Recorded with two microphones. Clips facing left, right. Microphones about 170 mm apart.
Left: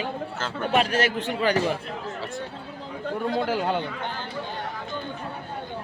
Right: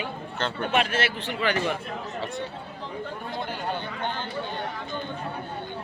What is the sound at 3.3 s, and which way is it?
Speech, 90° left.